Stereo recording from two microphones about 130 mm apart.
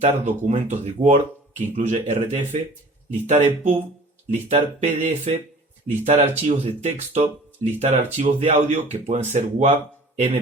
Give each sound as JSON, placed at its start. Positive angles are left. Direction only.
{"t": 0.0, "sound": "speech", "side_deg": -60}